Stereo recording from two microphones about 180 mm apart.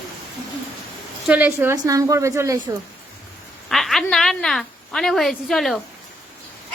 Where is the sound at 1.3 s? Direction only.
10° right (ahead or behind).